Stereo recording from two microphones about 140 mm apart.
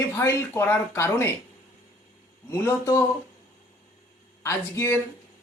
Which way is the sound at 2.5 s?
20° left (ahead or behind).